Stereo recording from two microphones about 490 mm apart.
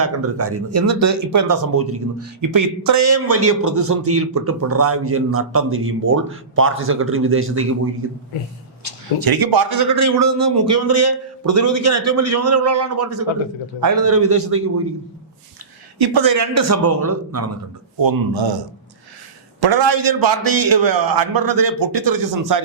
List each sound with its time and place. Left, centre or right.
0.0 s a man's voice: right
8.8 s a man's voice: right
16.0 s a man's voice: right
18.0 s a man's voice: right
19.5 s a man's voice: right